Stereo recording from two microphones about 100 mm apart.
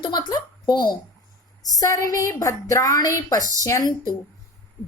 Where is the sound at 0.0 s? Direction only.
45° left (ahead or behind).